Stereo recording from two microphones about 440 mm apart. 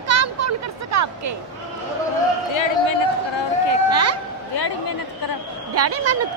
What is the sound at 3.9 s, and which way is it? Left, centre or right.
Speech, right.